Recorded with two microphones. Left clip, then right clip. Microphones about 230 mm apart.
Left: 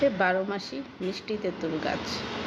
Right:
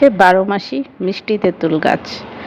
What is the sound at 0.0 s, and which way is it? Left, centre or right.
Speech, right.